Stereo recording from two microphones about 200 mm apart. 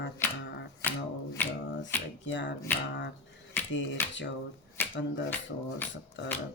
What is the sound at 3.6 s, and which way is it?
Camera, 10° left (ahead or behind).